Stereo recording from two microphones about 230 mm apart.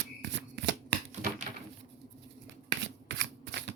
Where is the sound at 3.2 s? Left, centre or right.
Right.